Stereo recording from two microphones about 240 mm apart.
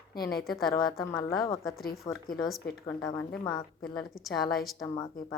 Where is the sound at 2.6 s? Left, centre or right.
Left.